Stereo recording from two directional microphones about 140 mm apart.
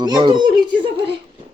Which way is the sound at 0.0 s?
30° right (ahead or behind).